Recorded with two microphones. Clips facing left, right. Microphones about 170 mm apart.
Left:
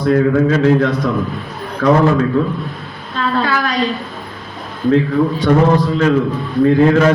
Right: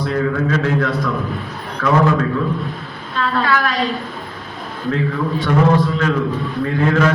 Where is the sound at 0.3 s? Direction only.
35° left (ahead or behind).